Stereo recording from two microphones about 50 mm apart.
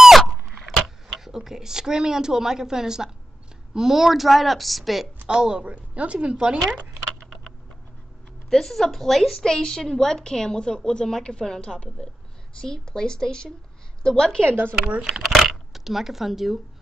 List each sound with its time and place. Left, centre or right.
0.2 s a sound: centre
0.8 s a woman's voice: centre
5.3 s a woman's voice: centre
8.5 s a woman's voice: centre
9.4 s a woman's voice: centre
14.4 s speech: right
15.2 s a sound: centre